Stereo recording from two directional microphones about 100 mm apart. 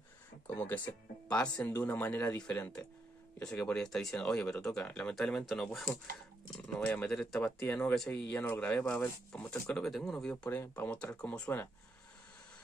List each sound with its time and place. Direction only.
0.6 s speech: 15° left (ahead or behind)
6.8 s speech: 15° left (ahead or behind)
10.3 s speech: 15° left (ahead or behind)